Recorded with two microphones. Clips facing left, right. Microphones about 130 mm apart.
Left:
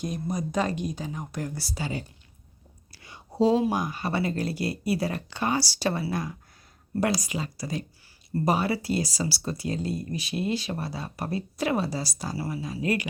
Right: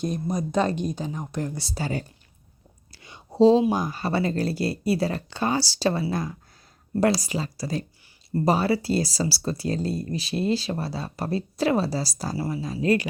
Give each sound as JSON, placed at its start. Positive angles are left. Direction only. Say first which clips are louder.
{"t": 0.5, "sound": "a woman's voice", "louder": "right 5 dB", "side_deg": -30}
{"t": 1.8, "sound": "speech", "louder": "right 4 dB", "side_deg": -50}
{"t": 2.9, "sound": "a sound", "louder": "right 3 dB", "side_deg": -25}
{"t": 3.7, "sound": "speech", "louder": "right 3 dB", "side_deg": -30}